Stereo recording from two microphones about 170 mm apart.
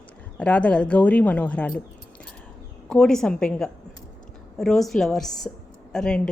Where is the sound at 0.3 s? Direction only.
5° left (ahead or behind).